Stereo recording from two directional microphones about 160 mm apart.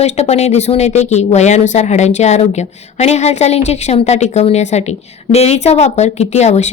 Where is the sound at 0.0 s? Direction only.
40° left (ahead or behind).